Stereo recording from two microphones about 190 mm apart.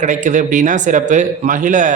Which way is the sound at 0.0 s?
40° right (ahead or behind).